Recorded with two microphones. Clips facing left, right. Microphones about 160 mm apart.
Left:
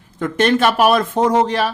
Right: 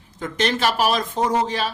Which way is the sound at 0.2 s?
55° left (ahead or behind).